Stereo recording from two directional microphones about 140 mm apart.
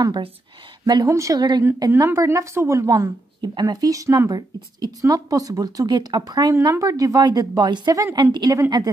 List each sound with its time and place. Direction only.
0.0 s a woman's voice: 30° right (ahead or behind)